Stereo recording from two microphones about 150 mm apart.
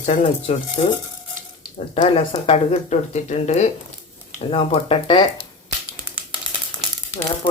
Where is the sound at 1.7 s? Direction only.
45° left (ahead or behind).